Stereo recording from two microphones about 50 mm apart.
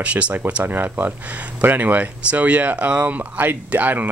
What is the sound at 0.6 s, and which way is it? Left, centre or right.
Speech, right.